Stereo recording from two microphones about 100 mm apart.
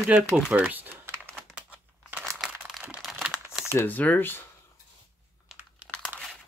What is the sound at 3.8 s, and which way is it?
Speech, 15° left (ahead or behind).